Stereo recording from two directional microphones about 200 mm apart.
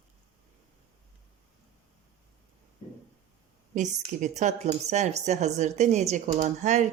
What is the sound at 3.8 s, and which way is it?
Speech, 35° right (ahead or behind).